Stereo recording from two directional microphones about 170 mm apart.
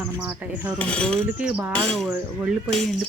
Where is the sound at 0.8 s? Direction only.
5° left (ahead or behind).